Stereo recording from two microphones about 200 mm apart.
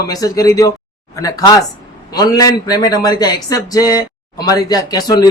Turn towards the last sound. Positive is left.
turn(degrees=20)  # may be behind; listen again after turning